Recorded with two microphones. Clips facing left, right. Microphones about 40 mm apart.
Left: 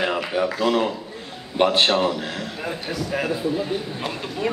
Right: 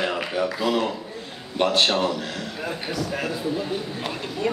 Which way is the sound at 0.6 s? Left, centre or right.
Centre.